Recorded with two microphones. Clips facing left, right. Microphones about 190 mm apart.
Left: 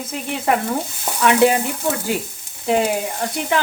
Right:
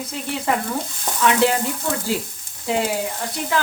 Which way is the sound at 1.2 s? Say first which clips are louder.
Left 3 dB; 15° left (ahead or behind).